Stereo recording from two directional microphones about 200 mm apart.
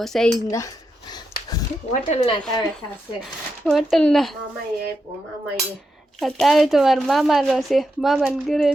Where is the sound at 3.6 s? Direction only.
Centre (ahead or behind).